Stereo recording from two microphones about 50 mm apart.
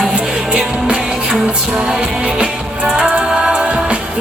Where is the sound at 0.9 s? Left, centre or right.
Centre.